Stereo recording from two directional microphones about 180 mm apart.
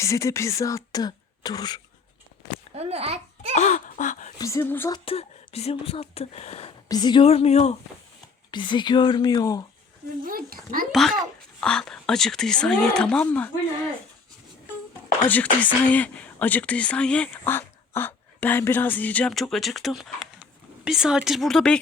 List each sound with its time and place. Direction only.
0.0 s speech: 15° left (ahead or behind)
0.9 s throat clearing: 20° left (ahead or behind)
2.7 s a child's voice: 35° right (ahead or behind)
3.5 s a sound: 40° left (ahead or behind)
4.4 s speech: 15° left (ahead or behind)
5.0 s speech: 30° left (ahead or behind)
6.8 s speech: 20° left (ahead or behind)
8.4 s speech: 25° left (ahead or behind)
10.2 s a child's voice: 50° right (ahead or behind)
11.2 s speech: 5° left (ahead or behind)
15.3 s speech: 10° left (ahead or behind)